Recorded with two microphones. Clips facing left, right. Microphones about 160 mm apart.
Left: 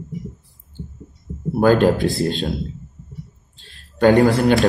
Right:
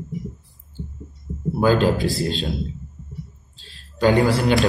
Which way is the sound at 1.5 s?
55° left (ahead or behind).